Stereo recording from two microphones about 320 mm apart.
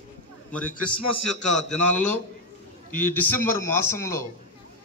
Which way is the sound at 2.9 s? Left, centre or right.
Left.